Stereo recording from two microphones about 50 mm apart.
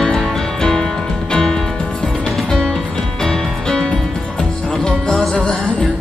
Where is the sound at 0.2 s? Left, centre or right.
Centre.